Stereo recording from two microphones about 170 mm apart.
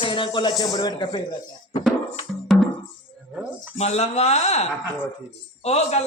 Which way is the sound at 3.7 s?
40° left (ahead or behind).